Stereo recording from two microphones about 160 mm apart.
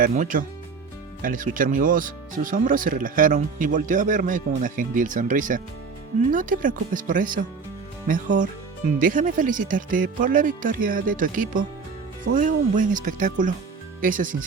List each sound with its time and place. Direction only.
0.0 s speech: 60° right (ahead or behind)